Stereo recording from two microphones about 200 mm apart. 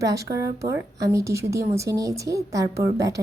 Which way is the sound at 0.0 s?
15° right (ahead or behind).